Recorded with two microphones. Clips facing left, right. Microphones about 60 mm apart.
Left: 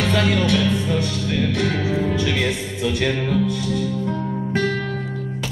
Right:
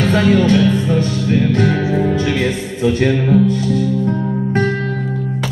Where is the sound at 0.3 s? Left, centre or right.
Right.